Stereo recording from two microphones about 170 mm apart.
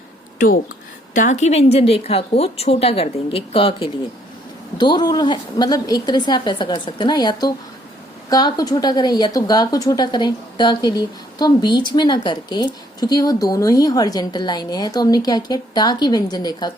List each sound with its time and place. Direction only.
1.1 s a woman's voice: 50° left (ahead or behind); by 16.7 s 25° left (ahead or behind)